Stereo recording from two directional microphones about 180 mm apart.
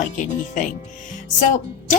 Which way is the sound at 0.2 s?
45° left (ahead or behind).